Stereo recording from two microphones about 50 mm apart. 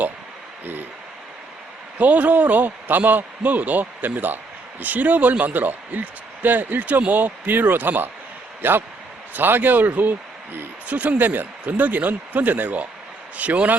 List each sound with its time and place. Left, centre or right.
2.0 s speech: right
10.8 s speech: right